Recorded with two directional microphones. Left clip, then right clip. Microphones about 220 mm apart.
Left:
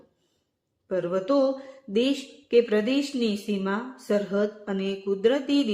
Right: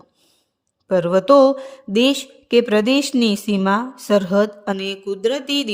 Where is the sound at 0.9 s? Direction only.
50° right (ahead or behind).